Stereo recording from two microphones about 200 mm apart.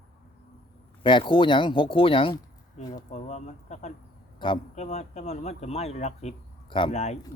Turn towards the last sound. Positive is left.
turn(degrees=35)  # may be behind; listen again after turning